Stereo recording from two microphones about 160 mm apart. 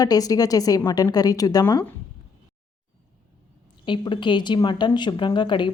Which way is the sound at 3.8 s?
30° left (ahead or behind).